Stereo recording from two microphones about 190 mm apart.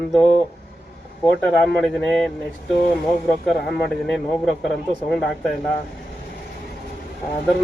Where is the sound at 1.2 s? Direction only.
5° left (ahead or behind).